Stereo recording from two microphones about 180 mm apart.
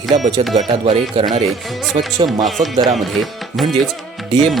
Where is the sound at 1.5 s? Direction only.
Centre (ahead or behind).